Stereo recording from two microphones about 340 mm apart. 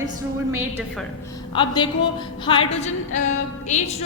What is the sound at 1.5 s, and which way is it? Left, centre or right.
Speech, centre.